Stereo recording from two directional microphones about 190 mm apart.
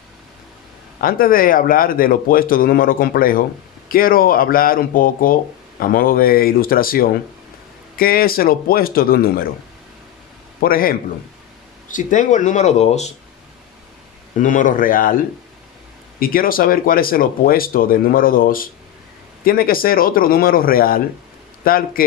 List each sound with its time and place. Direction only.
1.0 s speech: 50° left (ahead or behind)
10.6 s speech: 50° left (ahead or behind)
14.4 s speech: 45° left (ahead or behind)
16.2 s speech: 50° left (ahead or behind)